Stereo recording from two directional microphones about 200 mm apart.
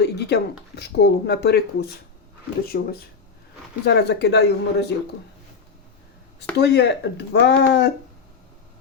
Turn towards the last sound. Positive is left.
turn(degrees=55)  # may be behind; listen again after turning